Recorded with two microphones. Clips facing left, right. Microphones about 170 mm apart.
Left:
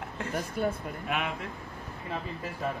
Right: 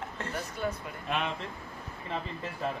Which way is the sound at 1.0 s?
5° left (ahead or behind).